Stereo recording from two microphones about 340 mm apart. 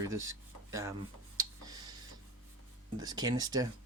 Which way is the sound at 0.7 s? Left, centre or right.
Centre.